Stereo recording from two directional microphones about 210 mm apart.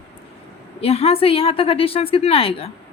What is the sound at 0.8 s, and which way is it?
A woman's voice, 30° left (ahead or behind).